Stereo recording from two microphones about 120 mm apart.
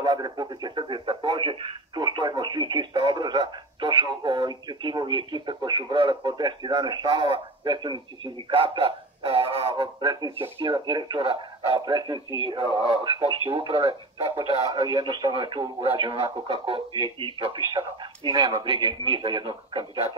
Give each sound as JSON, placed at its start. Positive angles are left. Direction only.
{"t": 0.0, "sound": "speech", "side_deg": -35}